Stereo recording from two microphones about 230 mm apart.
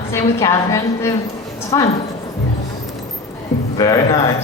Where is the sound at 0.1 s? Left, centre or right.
Centre.